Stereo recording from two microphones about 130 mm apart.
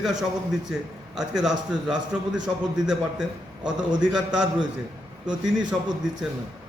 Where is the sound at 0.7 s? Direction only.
5° right (ahead or behind).